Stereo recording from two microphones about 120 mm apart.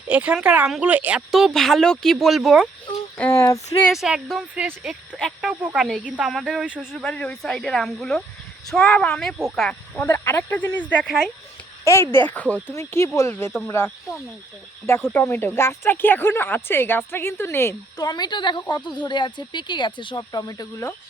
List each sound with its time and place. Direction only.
0.1 s a woman's voice: 10° right (ahead or behind)
1.3 s speech: centre (ahead or behind)
3.2 s speech: 20° left (ahead or behind)
3.9 s speech: 5° right (ahead or behind)
7.0 s speech: 10° left (ahead or behind)
10.0 s speech: 20° left (ahead or behind)
12.1 s speech: 15° left (ahead or behind)
17.9 s speech: 35° left (ahead or behind)